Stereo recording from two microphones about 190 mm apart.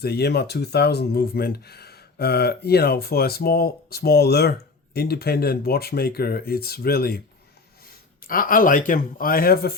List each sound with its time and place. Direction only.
0.0 s speech: 60° left (ahead or behind)